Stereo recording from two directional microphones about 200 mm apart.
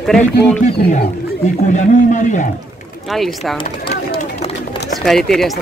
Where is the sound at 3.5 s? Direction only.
30° left (ahead or behind).